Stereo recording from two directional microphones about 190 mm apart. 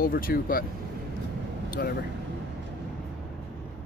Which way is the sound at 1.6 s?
50° left (ahead or behind).